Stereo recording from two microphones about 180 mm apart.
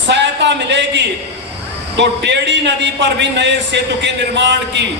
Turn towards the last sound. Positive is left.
turn(degrees=-75)  # may be behind; listen again after turning